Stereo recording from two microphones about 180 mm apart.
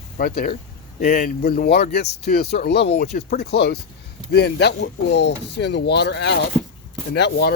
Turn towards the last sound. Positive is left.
turn(degrees=65)  # may be behind; listen again after turning